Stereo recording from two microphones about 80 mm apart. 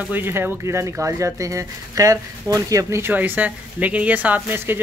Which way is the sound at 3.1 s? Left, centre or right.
Right.